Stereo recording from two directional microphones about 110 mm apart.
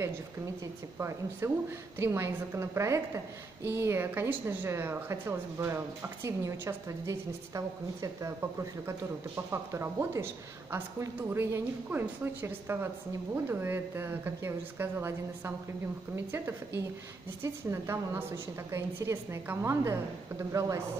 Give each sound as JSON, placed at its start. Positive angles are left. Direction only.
{"t": 0.9, "sound": "speech", "side_deg": -25}